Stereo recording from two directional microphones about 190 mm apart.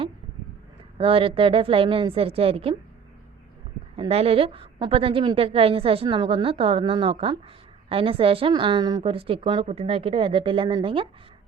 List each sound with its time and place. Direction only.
0.9 s a woman's voice: 30° right (ahead or behind)
3.9 s a woman's voice: 30° right (ahead or behind)